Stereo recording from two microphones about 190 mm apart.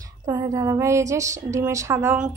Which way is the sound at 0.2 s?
15° right (ahead or behind).